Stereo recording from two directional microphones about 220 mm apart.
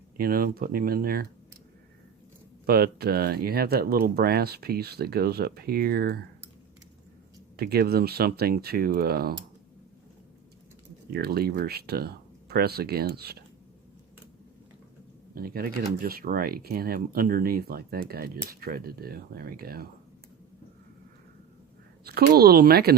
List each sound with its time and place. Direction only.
0.2 s speech: 40° right (ahead or behind)
2.6 s speech: 45° right (ahead or behind)
7.5 s speech: 45° right (ahead or behind)
11.1 s speech: 45° right (ahead or behind)
15.4 s speech: 45° right (ahead or behind)
22.0 s speech: 45° right (ahead or behind)